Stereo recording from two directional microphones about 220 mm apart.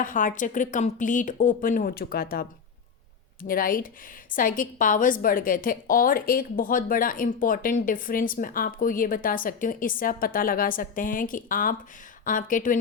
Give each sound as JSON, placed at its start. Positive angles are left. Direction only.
{"t": 0.0, "sound": "a woman's voice", "side_deg": 35}